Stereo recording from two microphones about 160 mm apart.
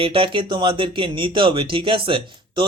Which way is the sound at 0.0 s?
35° right (ahead or behind).